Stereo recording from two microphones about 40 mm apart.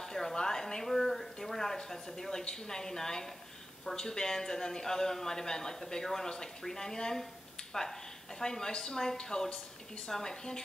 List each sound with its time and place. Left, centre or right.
0.0 s a sound: centre
2.4 s a man's voice: centre
8.4 s a man's voice: centre